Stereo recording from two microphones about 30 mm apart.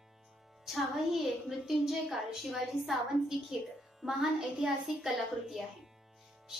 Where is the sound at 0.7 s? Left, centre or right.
Centre.